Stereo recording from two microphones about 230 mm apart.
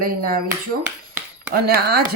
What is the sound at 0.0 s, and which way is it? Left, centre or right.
Speech, right.